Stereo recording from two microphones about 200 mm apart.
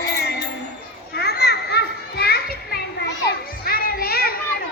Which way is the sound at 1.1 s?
55° left (ahead or behind).